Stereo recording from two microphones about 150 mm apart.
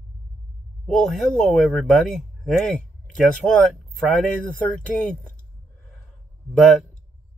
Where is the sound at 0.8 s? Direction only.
5° left (ahead or behind).